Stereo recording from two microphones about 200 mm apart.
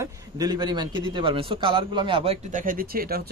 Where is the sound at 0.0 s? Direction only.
20° right (ahead or behind).